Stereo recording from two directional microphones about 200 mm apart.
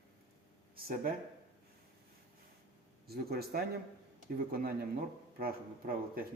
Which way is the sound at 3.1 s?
50° right (ahead or behind).